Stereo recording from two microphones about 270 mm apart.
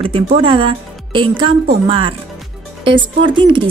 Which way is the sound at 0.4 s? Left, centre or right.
Centre.